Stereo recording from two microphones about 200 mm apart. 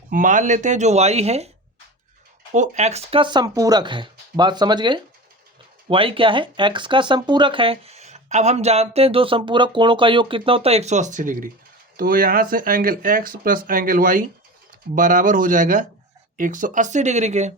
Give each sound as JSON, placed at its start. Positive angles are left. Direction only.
{"t": 0.1, "sound": "speech", "side_deg": -40}
{"t": 2.5, "sound": "speech", "side_deg": -35}